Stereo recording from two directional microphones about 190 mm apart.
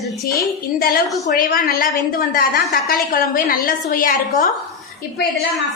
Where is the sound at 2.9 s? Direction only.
50° left (ahead or behind).